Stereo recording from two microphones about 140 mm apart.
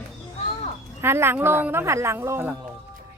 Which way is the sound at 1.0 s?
15° right (ahead or behind).